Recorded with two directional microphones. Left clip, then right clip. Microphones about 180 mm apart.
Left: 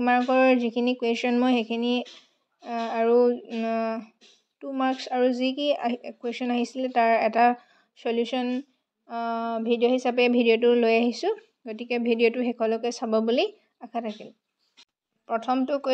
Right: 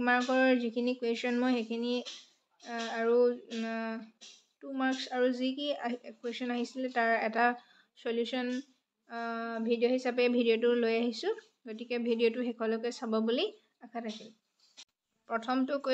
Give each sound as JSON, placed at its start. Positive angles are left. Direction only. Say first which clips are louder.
{"t": 0.0, "sound": "speech", "louder": "left 7 dB", "side_deg": 30}
{"t": 15.2, "sound": "speech", "louder": "left 7 dB", "side_deg": 25}